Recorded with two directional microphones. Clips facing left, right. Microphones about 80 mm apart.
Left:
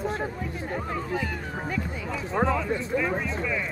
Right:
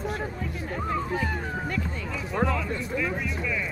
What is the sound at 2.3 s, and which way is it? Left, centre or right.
Music, centre.